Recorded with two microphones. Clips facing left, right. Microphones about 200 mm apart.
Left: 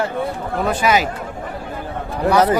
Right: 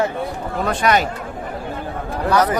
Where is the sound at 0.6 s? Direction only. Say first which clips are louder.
Even; 5° left (ahead or behind).